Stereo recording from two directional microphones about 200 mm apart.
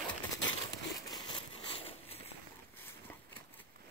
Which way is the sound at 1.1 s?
25° left (ahead or behind).